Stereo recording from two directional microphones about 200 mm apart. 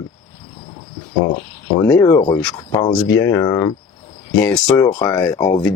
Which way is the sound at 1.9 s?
10° left (ahead or behind).